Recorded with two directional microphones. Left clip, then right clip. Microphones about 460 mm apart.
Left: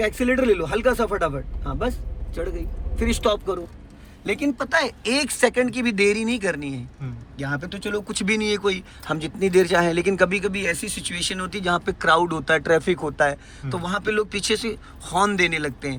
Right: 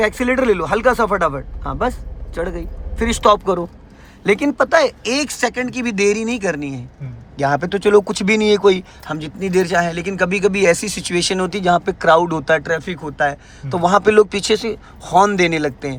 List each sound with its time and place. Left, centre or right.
0.0 s speech: centre
1.8 s vehicle: centre
3.0 s a man's voice: centre